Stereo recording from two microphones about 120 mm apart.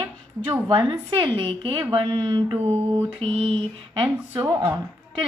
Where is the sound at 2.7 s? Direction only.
50° right (ahead or behind).